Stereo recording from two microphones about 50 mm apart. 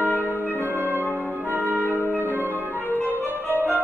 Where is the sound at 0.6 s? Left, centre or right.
Right.